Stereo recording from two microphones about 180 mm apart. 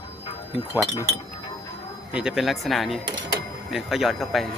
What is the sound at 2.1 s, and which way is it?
Speech, 5° right (ahead or behind).